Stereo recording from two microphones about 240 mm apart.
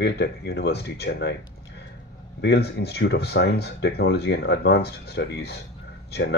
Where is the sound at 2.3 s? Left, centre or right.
Left.